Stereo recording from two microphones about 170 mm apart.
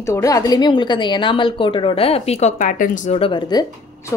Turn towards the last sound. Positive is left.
turn(degrees=30)  # may be behind; listen again after turning